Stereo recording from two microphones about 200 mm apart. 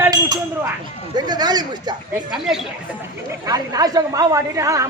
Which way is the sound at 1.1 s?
20° right (ahead or behind).